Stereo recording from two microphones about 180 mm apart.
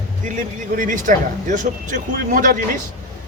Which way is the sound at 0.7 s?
45° right (ahead or behind).